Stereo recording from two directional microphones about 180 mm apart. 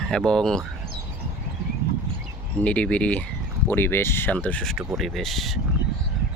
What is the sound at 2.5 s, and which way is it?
Speech, 5° left (ahead or behind).